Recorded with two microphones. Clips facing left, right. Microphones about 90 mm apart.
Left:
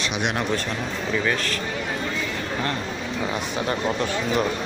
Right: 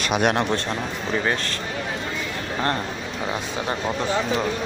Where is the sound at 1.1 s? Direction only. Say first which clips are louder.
Right 1 dB; 30° right (ahead or behind).